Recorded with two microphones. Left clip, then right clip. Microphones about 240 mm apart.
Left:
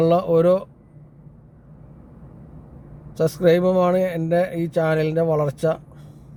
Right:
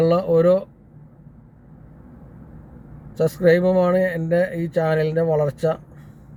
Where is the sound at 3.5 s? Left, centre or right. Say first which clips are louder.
Right 1 dB; centre.